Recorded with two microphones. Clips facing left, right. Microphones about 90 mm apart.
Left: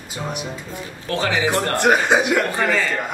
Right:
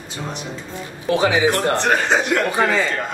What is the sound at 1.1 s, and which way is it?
Speech, 15° right (ahead or behind).